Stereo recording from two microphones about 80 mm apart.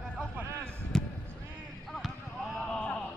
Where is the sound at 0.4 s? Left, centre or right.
Right.